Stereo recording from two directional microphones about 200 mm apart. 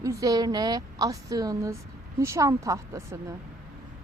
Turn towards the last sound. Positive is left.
turn(degrees=-15)  # may be behind; listen again after turning